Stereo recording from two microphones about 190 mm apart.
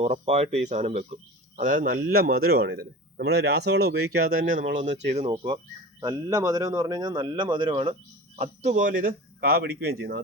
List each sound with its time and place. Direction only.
0.0 s speech: 35° right (ahead or behind)
4.8 s speech: 35° right (ahead or behind)
8.4 s speech: 40° right (ahead or behind); by 10.2 s 55° right (ahead or behind)